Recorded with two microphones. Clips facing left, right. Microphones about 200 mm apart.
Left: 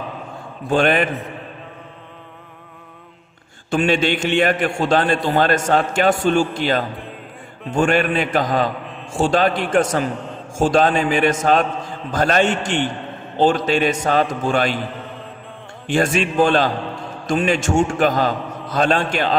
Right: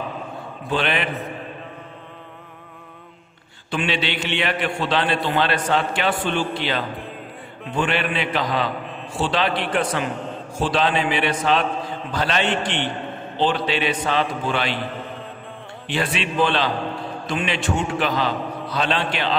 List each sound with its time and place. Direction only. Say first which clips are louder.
0.7 s a man's voice: left 7 dB; 45° left (ahead or behind)
3.7 s a man's voice: left 7 dB; 45° left (ahead or behind)
15.9 s a man's voice: left 6 dB; 45° left (ahead or behind)